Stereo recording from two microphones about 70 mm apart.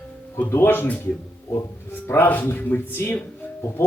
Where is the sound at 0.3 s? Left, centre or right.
Left.